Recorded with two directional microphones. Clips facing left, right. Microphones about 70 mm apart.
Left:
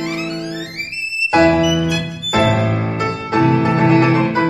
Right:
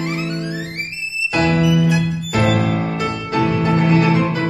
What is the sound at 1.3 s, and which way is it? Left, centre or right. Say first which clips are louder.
Music: left 4 dB; left.